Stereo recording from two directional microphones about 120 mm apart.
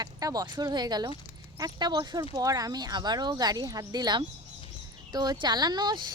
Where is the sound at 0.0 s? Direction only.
30° right (ahead or behind).